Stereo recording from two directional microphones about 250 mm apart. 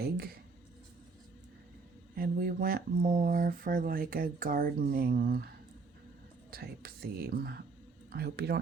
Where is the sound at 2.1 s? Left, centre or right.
Right.